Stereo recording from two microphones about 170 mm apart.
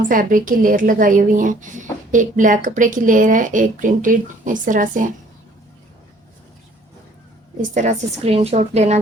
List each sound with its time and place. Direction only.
0.1 s a woman's voice: 55° right (ahead or behind)
7.7 s a woman's voice: 45° right (ahead or behind)